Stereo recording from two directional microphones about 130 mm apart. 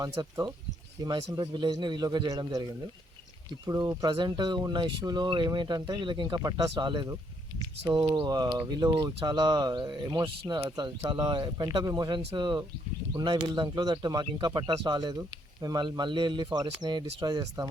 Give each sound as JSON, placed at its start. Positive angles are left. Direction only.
{"t": 0.0, "sound": "speech", "side_deg": -25}
{"t": 3.7, "sound": "speech", "side_deg": -30}